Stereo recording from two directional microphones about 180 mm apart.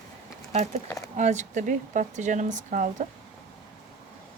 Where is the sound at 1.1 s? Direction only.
40° right (ahead or behind).